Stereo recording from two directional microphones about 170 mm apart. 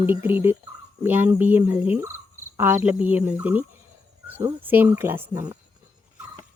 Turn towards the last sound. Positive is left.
turn(degrees=-15)  # may be behind; listen again after turning